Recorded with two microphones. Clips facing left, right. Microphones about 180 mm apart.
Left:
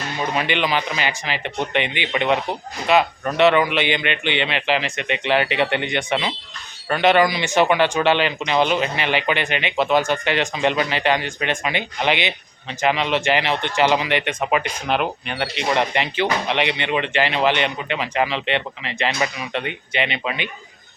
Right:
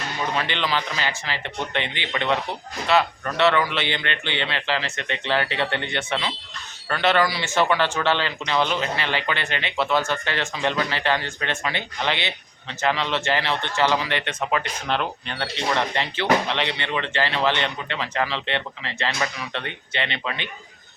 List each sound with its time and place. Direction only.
0.3 s speech: 15° left (ahead or behind)